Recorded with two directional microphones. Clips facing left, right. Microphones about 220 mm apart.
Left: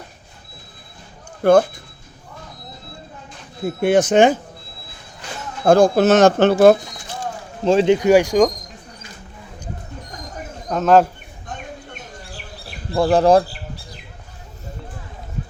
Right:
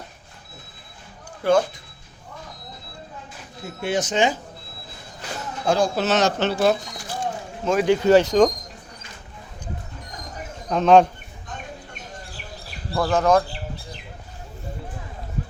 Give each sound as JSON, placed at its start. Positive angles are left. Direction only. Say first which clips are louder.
{"t": 1.4, "sound": "speech", "louder": "left 6 dB", "side_deg": 55}
{"t": 3.8, "sound": "speech", "louder": "left 8 dB", "side_deg": 55}
{"t": 5.6, "sound": "speech", "louder": "left 8 dB", "side_deg": 50}
{"t": 7.6, "sound": "speech", "louder": "left 5 dB", "side_deg": 30}
{"t": 7.9, "sound": "speech", "louder": "left 2 dB", "side_deg": 15}
{"t": 10.7, "sound": "speech", "louder": "even", "side_deg": 5}
{"t": 12.9, "sound": "speech", "louder": "left 5 dB", "side_deg": 30}